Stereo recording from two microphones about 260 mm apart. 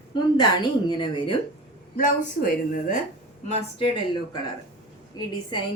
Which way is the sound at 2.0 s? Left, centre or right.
Left.